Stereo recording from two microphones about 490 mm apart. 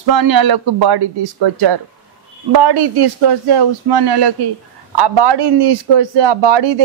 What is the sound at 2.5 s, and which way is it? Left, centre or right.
A man's voice, right.